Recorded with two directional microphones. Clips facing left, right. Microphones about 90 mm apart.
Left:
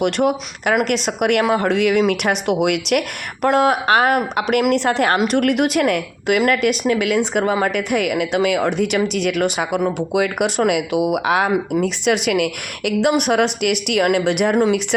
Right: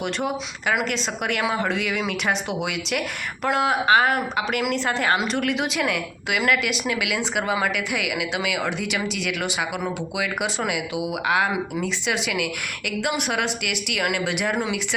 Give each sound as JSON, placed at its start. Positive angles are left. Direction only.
{"t": 0.0, "sound": "a woman's voice", "side_deg": 60}